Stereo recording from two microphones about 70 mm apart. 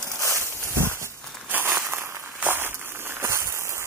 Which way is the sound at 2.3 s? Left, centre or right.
Right.